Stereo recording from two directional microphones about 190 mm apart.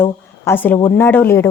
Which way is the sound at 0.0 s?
10° left (ahead or behind).